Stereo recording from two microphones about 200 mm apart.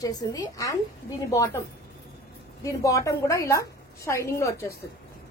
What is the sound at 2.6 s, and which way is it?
A woman's voice, 15° left (ahead or behind).